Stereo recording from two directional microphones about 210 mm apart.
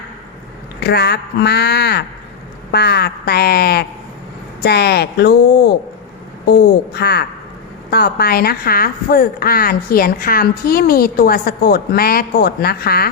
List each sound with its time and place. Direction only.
0.9 s a woman's voice: 50° left (ahead or behind)
6.5 s a woman's voice: 50° left (ahead or behind)